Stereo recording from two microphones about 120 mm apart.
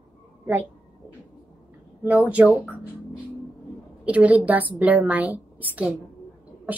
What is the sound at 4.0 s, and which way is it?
A woman's voice, 10° right (ahead or behind).